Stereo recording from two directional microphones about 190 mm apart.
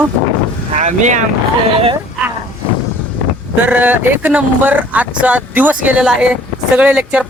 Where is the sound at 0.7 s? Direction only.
40° right (ahead or behind).